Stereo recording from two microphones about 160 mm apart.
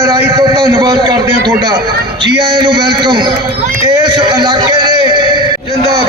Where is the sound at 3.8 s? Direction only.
25° right (ahead or behind).